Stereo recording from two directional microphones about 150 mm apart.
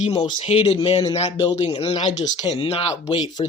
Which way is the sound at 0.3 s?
50° left (ahead or behind).